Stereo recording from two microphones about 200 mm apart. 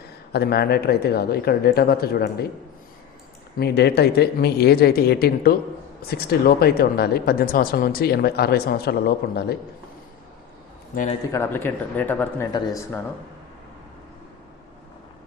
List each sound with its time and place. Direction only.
0.3 s speech: 55° left (ahead or behind)
3.6 s speech: 55° left (ahead or behind)
10.9 s a man's voice: 40° left (ahead or behind)
11.3 s speech: 10° left (ahead or behind)